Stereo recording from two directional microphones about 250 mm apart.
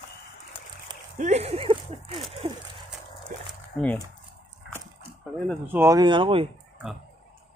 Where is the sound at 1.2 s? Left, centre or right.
Right.